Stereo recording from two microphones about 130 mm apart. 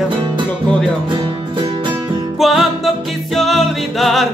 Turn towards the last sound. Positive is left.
turn(degrees=0)  # may be behind; listen again after turning